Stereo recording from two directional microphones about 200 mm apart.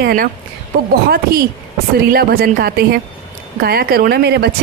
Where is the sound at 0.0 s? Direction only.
45° right (ahead or behind).